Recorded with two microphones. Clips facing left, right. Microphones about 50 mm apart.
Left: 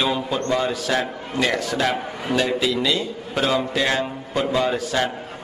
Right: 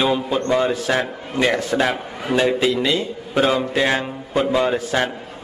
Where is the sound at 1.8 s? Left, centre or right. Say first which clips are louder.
Right 1 dB; centre.